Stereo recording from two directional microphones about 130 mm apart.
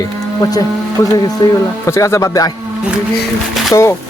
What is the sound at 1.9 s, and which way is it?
Speech, 20° left (ahead or behind).